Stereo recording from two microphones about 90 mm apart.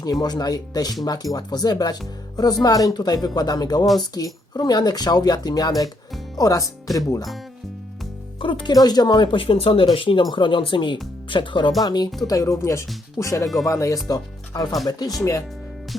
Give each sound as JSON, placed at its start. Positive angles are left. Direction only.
{"t": 0.0, "sound": "speech", "side_deg": 45}
{"t": 8.4, "sound": "speech", "side_deg": 70}
{"t": 8.7, "sound": "speech", "side_deg": 50}
{"t": 10.3, "sound": "speech", "side_deg": 65}
{"t": 11.8, "sound": "speech", "side_deg": 50}
{"t": 12.3, "sound": "speech", "side_deg": 35}
{"t": 15.2, "sound": "speech", "side_deg": 35}